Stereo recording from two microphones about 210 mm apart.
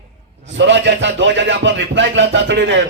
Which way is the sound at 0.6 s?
60° right (ahead or behind).